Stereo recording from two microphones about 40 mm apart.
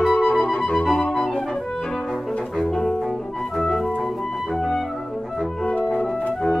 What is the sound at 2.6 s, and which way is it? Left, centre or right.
Music, centre.